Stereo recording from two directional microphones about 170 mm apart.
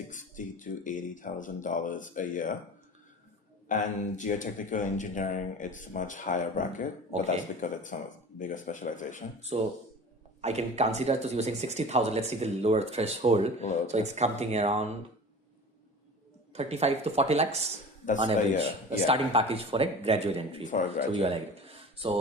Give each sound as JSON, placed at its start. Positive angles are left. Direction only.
{"t": 0.1, "sound": "speech", "side_deg": 50}
{"t": 3.7, "sound": "speech", "side_deg": 50}
{"t": 9.4, "sound": "speech", "side_deg": -40}
{"t": 16.5, "sound": "speech", "side_deg": -40}